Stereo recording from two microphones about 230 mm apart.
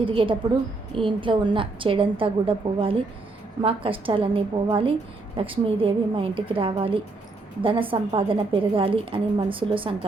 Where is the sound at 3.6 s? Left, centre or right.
Right.